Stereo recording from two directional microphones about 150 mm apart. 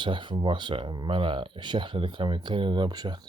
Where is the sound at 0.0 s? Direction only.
30° right (ahead or behind).